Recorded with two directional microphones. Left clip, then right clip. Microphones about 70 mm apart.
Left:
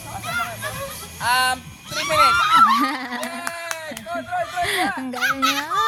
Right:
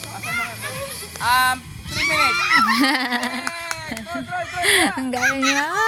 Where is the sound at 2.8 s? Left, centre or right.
Right.